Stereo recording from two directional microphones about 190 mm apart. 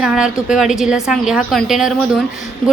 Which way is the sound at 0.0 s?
5° right (ahead or behind).